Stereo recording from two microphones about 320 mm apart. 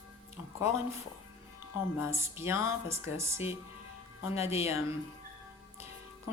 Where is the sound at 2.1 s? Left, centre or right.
Centre.